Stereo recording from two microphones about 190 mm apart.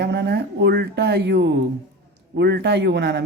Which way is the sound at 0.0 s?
60° right (ahead or behind).